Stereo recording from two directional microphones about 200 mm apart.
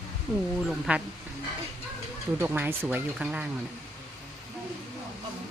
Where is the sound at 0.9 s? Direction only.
5° right (ahead or behind).